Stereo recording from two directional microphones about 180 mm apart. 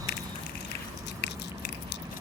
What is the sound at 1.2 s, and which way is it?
Biting, 70° left (ahead or behind).